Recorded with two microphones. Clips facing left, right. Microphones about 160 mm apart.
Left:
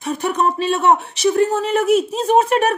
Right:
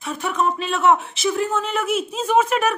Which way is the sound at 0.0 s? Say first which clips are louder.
Left 4 dB; 40° left (ahead or behind).